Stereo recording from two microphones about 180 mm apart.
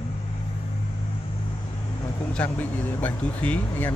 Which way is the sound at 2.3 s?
10° left (ahead or behind).